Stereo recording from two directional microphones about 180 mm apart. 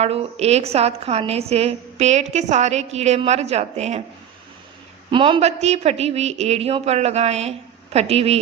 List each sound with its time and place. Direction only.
0.0 s a woman's voice: 35° right (ahead or behind)
5.1 s a woman's voice: 30° right (ahead or behind)